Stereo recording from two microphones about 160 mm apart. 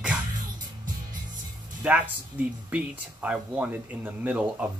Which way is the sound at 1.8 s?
10° right (ahead or behind).